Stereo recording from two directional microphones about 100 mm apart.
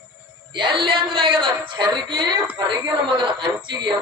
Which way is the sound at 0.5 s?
55° right (ahead or behind).